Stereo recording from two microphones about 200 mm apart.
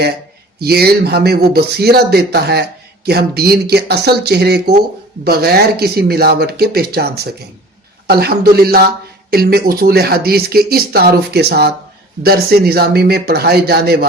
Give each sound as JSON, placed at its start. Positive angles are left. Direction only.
{"t": 0.6, "sound": "speech", "side_deg": -50}